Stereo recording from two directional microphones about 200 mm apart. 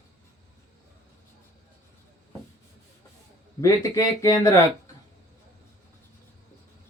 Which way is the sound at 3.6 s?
15° left (ahead or behind).